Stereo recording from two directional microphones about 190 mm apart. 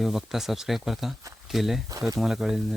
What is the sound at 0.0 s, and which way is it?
Speech, centre (ahead or behind).